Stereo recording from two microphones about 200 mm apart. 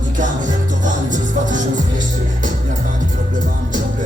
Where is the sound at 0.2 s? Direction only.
40° right (ahead or behind).